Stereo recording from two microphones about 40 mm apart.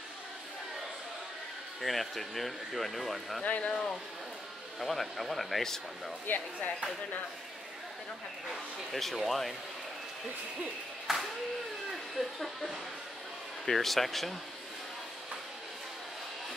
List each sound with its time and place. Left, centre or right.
1.8 s speech: centre
3.4 s speech: left
4.7 s speech: centre
6.2 s speech: left
8.5 s speech: centre
11.1 s a sound: centre
11.9 s speech: centre